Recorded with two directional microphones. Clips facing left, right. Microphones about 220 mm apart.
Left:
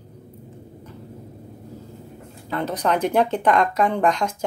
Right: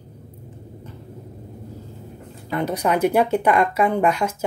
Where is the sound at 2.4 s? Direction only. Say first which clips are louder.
Right 1 dB; 15° right (ahead or behind).